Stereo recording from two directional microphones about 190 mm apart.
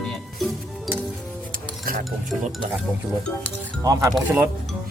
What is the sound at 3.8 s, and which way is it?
Speech, 20° right (ahead or behind).